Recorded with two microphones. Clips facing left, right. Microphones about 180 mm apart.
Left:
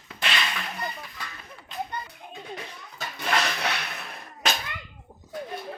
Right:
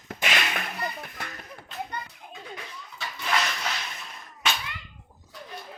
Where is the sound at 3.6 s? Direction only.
65° left (ahead or behind).